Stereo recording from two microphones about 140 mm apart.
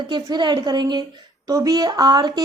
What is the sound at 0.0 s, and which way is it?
A woman's voice, 35° right (ahead or behind).